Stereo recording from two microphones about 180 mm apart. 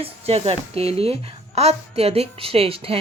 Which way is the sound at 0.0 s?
35° right (ahead or behind).